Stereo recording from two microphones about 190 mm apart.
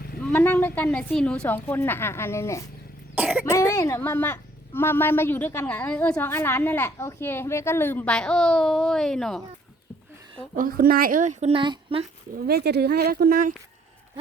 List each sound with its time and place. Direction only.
0.2 s a woman's voice: 5° left (ahead or behind)
3.2 s cough: 10° right (ahead or behind)
3.4 s a woman's voice: 15° left (ahead or behind)
10.5 s speech: 45° right (ahead or behind); by 12.0 s 25° right (ahead or behind)
12.5 s speech: 60° right (ahead or behind)